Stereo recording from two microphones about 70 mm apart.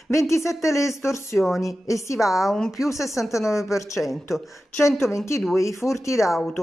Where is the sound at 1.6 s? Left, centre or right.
Left.